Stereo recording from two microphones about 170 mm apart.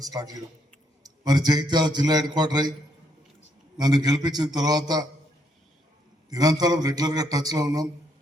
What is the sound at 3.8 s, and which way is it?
Speech, 25° right (ahead or behind).